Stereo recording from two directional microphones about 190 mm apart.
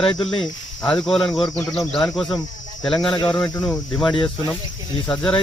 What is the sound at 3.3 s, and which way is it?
Speech, 20° left (ahead or behind).